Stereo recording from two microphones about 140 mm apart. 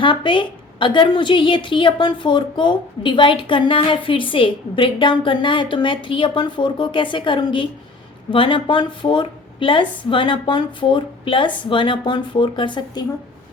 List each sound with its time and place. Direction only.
0.0 s a woman's voice: 35° left (ahead or behind)